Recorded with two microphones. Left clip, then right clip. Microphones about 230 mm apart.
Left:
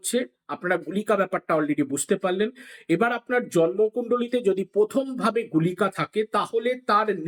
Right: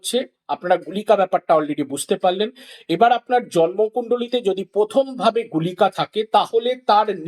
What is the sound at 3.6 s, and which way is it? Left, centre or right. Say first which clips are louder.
Speech: right 2 dB; right.